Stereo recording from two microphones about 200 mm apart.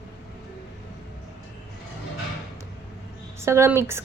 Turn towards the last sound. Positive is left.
turn(degrees=-15)  # may be behind; listen again after turning